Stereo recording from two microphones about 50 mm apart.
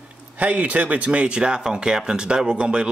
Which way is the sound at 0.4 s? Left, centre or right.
Right.